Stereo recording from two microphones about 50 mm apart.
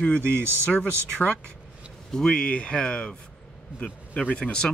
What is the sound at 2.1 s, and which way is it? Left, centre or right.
Speech, centre.